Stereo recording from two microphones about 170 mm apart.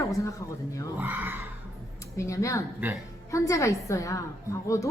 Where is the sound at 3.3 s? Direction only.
20° left (ahead or behind).